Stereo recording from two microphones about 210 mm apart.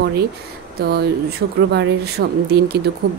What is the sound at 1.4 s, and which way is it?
A woman's voice, 55° right (ahead or behind).